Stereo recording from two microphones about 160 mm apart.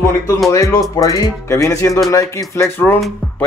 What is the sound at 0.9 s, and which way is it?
A man's voice, 20° left (ahead or behind).